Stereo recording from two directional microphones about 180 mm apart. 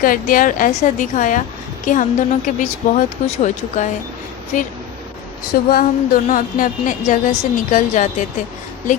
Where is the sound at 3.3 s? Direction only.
40° left (ahead or behind).